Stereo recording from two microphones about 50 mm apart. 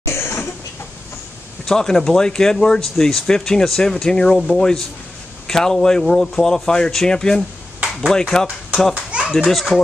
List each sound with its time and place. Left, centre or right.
0.1 s cough: left
1.7 s speech: centre
8.9 s children playing: right
9.4 s a child's voice: centre